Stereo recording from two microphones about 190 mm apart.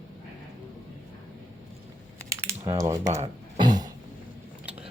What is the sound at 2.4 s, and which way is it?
Speech, 15° right (ahead or behind).